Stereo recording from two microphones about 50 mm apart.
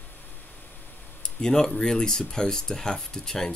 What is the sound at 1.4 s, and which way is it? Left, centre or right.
Speech, centre.